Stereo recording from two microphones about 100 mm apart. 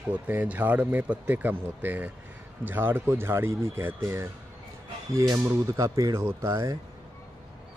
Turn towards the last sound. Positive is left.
turn(degrees=-30)  # may be behind; listen again after turning